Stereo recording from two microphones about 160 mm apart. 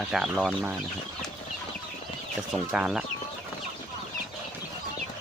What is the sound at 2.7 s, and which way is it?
Speech, 5° right (ahead or behind).